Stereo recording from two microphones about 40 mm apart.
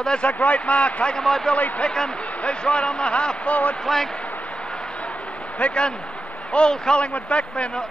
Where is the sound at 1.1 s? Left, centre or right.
Centre.